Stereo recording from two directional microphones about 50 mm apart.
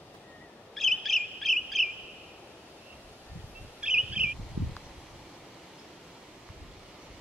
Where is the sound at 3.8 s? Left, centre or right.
Right.